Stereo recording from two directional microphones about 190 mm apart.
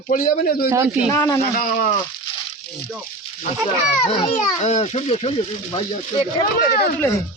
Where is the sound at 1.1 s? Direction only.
15° left (ahead or behind).